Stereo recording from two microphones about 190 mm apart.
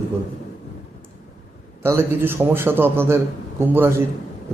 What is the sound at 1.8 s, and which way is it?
A man's voice, 10° right (ahead or behind).